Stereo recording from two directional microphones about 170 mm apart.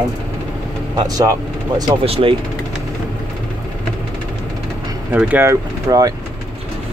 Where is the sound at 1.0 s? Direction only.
20° right (ahead or behind).